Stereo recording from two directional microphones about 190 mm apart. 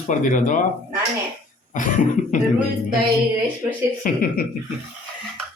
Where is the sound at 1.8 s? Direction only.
40° left (ahead or behind).